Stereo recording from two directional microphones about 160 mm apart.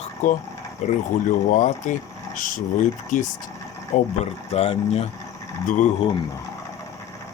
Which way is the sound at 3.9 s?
50° left (ahead or behind).